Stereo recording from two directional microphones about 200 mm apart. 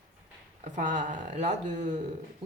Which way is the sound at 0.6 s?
40° right (ahead or behind).